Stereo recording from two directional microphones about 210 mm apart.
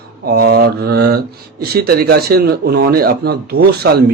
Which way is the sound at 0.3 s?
45° right (ahead or behind).